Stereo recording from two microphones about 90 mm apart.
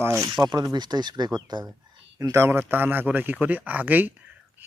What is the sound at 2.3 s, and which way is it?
Speech, 25° right (ahead or behind).